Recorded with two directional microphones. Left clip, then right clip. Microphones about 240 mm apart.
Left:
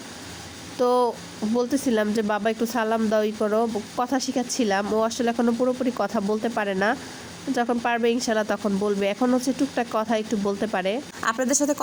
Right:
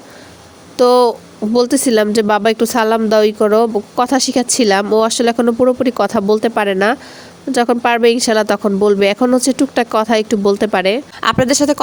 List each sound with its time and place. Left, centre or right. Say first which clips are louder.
0.9 s speech: right 10 dB; right
5.0 s speech: right 10 dB; right